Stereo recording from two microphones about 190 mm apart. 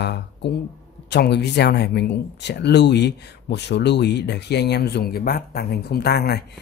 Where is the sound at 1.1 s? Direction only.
60° left (ahead or behind).